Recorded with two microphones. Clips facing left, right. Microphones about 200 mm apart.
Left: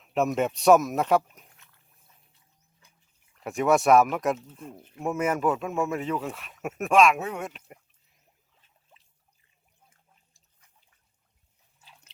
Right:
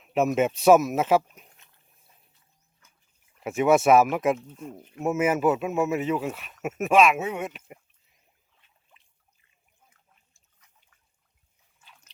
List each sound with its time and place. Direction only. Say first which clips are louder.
0.0 s speech: right 2 dB; 5° right (ahead or behind)
1.5 s dog: even; 20° right (ahead or behind)
3.4 s speech: right 2 dB; 5° right (ahead or behind)
11.8 s a sound: left 1 dB; 35° left (ahead or behind)